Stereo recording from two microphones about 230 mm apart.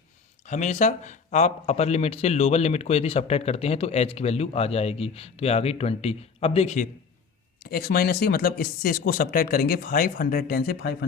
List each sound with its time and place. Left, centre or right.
0.4 s a man's voice: left
7.6 s speech: left